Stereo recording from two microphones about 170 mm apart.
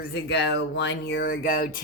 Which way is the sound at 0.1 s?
80° left.